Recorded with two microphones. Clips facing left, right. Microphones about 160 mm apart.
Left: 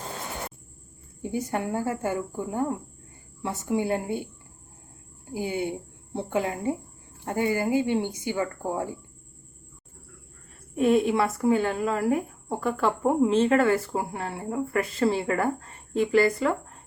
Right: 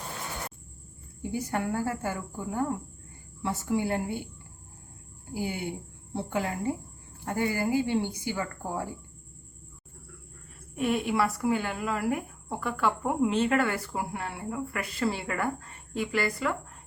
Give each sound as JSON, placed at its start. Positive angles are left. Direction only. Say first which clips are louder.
{"t": 1.2, "sound": "speech", "louder": "left 2 dB", "side_deg": 20}
{"t": 5.3, "sound": "speech", "louder": "left 4 dB", "side_deg": 20}
{"t": 10.8, "sound": "speech", "louder": "left 5 dB", "side_deg": 35}